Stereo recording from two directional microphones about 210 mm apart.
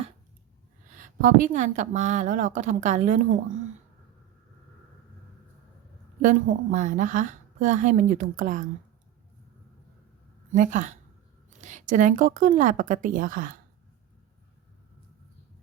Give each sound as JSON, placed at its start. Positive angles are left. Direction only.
{"t": 0.9, "sound": "a woman's voice", "side_deg": -40}
{"t": 6.2, "sound": "a woman's voice", "side_deg": -35}
{"t": 10.5, "sound": "a woman's voice", "side_deg": -40}